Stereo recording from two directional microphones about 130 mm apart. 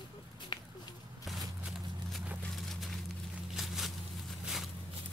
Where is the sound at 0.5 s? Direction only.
40° left (ahead or behind).